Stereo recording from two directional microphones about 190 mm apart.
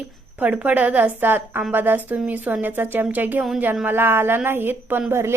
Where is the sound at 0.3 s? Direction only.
10° right (ahead or behind).